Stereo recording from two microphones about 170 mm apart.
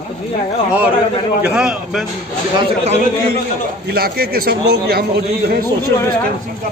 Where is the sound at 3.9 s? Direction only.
65° right (ahead or behind).